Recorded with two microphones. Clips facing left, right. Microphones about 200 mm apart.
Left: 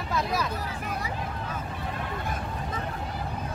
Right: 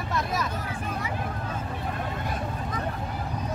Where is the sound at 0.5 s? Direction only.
35° left (ahead or behind).